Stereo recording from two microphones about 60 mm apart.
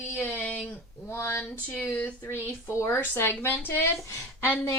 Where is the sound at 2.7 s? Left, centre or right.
Left.